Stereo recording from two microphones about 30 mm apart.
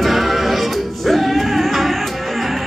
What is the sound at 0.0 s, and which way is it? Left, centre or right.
Music, centre.